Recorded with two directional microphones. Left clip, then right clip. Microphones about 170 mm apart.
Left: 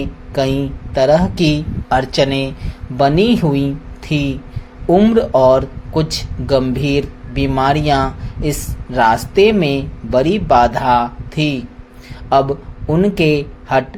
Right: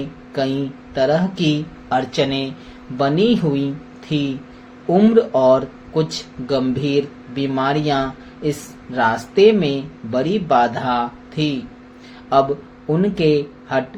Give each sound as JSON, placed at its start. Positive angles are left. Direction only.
{"t": 0.3, "sound": "speech", "side_deg": 45}
{"t": 12.9, "sound": "speech", "side_deg": 45}